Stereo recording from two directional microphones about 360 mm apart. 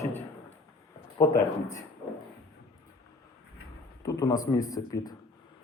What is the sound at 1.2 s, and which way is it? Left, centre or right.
Speech, centre.